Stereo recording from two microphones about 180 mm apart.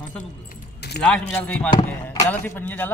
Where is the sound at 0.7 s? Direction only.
65° left (ahead or behind).